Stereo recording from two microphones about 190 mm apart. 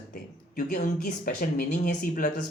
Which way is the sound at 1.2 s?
50° left (ahead or behind).